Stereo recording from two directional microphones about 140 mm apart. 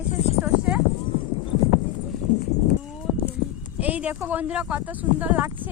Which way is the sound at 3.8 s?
10° right (ahead or behind).